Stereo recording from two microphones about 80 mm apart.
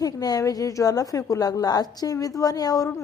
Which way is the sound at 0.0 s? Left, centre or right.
Left.